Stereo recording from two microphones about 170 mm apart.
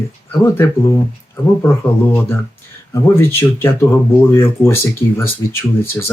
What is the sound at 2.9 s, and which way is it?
Speech, 15° left (ahead or behind).